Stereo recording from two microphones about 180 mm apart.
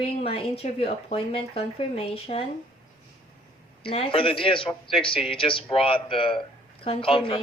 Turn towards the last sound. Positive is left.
turn(degrees=30)  # may be behind; listen again after turning